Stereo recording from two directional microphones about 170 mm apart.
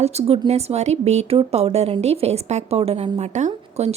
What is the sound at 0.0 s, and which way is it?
A woman's voice, 40° right (ahead or behind).